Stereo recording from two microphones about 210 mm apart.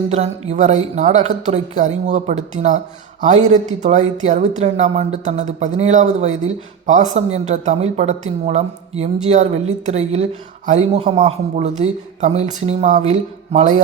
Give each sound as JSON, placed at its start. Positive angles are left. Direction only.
{"t": 0.1, "sound": "speech", "side_deg": -30}
{"t": 4.6, "sound": "speech", "side_deg": -30}